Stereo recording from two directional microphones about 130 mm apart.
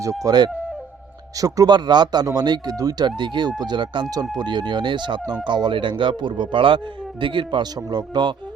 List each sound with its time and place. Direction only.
0.0 s a man's voice: 25° right (ahead or behind)